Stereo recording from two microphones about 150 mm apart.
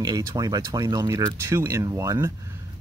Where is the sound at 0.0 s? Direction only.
25° right (ahead or behind).